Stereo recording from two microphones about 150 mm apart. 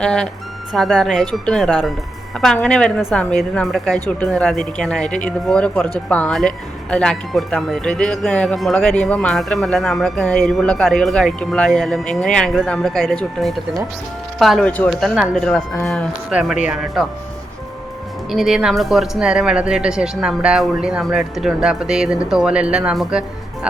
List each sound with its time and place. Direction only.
0.0 s speech: 5° left (ahead or behind)
18.3 s speech: centre (ahead or behind)